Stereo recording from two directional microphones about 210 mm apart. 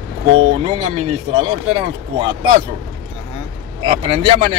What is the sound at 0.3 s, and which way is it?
Speech, 30° right (ahead or behind).